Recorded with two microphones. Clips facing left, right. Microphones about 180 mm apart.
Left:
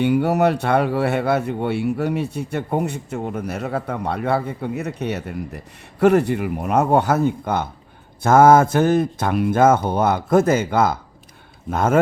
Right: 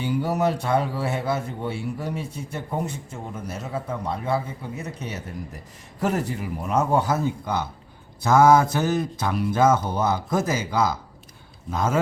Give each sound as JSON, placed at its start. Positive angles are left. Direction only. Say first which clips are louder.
{"t": 0.0, "sound": "a man's voice", "louder": "left 6 dB", "side_deg": 65}